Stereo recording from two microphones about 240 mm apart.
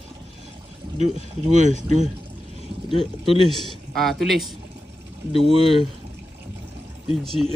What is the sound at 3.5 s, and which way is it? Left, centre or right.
Speech, centre.